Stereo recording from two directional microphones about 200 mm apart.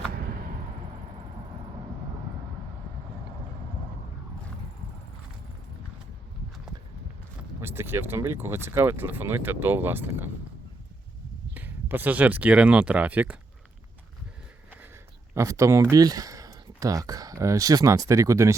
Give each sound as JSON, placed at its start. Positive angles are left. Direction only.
{"t": 0.1, "sound": "a sound", "side_deg": -50}
{"t": 7.6, "sound": "speech", "side_deg": -10}
{"t": 11.5, "sound": "speech", "side_deg": -10}
{"t": 15.4, "sound": "speech", "side_deg": -15}